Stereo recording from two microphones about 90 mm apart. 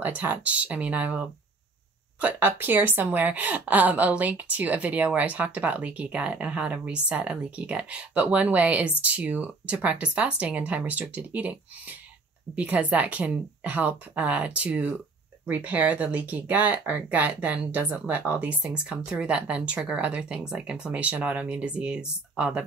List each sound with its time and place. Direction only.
0.0 s speech: 20° right (ahead or behind)
2.2 s speech: 20° right (ahead or behind)
12.5 s speech: 15° right (ahead or behind)